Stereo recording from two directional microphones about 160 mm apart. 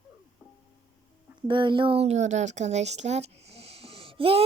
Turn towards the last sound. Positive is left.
turn(degrees=-35)  # may be behind; listen again after turning